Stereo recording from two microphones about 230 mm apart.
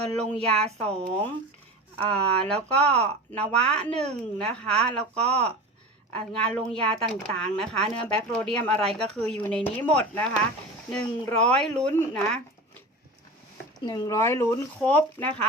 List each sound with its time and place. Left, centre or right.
0.2 s speech: centre
2.6 s speech: right
2.9 s speech: centre
13.8 s speech: centre